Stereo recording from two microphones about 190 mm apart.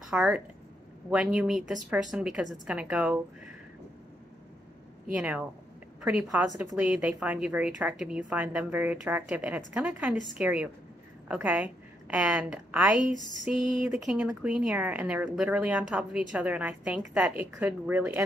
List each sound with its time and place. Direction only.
0.0 s a woman's voice: 5° right (ahead or behind)
5.1 s a woman's voice: 10° right (ahead or behind)